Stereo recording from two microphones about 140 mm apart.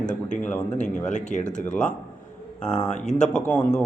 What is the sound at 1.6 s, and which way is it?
Speech, 5° left (ahead or behind).